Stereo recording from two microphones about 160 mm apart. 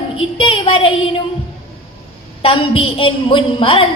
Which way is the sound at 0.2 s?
35° left (ahead or behind).